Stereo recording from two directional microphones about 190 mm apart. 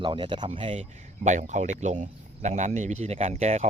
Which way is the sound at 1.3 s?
40° right (ahead or behind).